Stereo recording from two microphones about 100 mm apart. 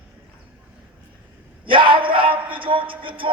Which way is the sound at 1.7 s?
60° right (ahead or behind).